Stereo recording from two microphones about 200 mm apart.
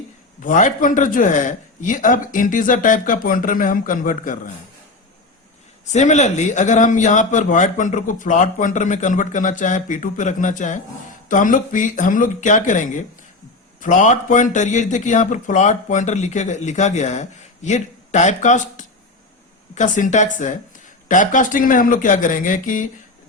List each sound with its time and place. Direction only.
0.4 s speech: 40° left (ahead or behind)
5.9 s speech: 35° left (ahead or behind)